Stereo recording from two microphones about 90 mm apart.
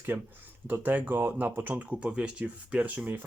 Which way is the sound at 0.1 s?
20° right (ahead or behind).